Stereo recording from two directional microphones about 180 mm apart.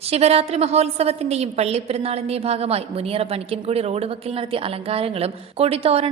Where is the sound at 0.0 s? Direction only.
35° right (ahead or behind).